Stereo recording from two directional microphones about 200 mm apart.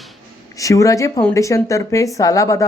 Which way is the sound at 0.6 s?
15° left (ahead or behind).